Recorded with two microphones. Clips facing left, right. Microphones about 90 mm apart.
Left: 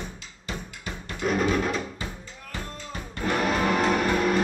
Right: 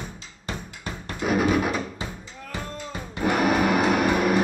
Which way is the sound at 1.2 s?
10° right (ahead or behind).